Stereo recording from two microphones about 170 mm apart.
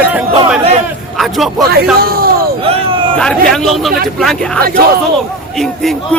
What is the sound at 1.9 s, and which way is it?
Speech, 60° right (ahead or behind).